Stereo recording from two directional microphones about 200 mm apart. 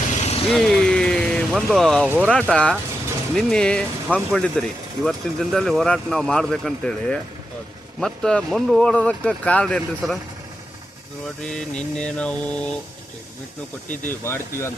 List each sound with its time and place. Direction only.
0.1 s vehicle: 35° left (ahead or behind)
0.4 s vehicle: 5° left (ahead or behind)
2.0 s speech: 5° right (ahead or behind)
2.3 s speech: 5° left (ahead or behind)
11.4 s speech: 5° left (ahead or behind)
14.3 s speech: 10° left (ahead or behind)